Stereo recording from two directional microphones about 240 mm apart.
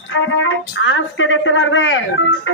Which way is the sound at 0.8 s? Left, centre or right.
Left.